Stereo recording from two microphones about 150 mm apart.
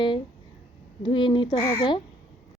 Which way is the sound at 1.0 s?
35° left (ahead or behind).